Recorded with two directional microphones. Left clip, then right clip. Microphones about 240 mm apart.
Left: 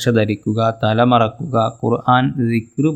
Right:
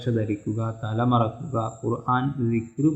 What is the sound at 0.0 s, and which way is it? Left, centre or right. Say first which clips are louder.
Speech: left 10 dB; left.